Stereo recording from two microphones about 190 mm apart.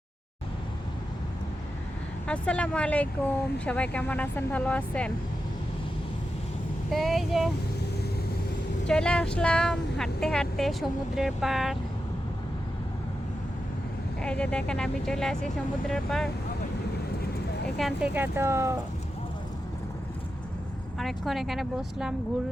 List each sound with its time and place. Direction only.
2.2 s speech: 5° left (ahead or behind)
6.9 s speech: centre (ahead or behind)
8.9 s speech: 5° left (ahead or behind)
14.2 s speech: 5° left (ahead or behind)
17.7 s speech: centre (ahead or behind)
18.1 s speech: 10° right (ahead or behind)
21.0 s speech: centre (ahead or behind)